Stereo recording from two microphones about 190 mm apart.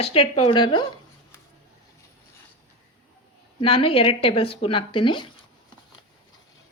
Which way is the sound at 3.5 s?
30° left (ahead or behind).